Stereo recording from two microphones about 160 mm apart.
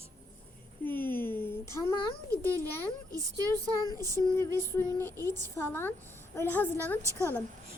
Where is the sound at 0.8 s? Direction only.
10° left (ahead or behind).